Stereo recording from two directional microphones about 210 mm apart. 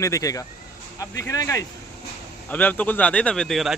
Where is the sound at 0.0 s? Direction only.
15° left (ahead or behind).